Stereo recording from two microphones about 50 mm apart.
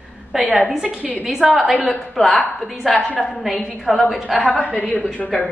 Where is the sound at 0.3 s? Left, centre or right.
Centre.